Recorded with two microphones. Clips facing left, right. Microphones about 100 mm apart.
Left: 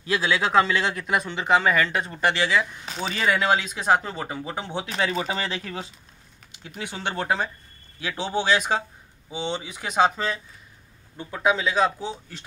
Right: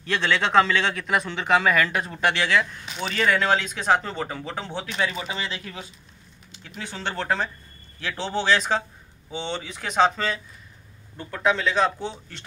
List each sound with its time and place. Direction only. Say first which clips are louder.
0.0 s speech: even; 5° left (ahead or behind)
4.8 s speech: left 3 dB; 35° left (ahead or behind)
6.8 s speech: left 1 dB; 15° left (ahead or behind)